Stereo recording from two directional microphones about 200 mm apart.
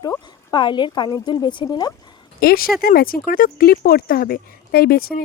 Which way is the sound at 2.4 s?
50° left (ahead or behind).